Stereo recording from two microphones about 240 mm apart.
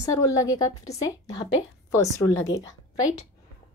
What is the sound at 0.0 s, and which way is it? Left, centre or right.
Speech, centre.